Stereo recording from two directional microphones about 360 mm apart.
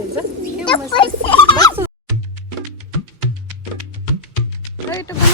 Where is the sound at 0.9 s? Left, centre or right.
Centre.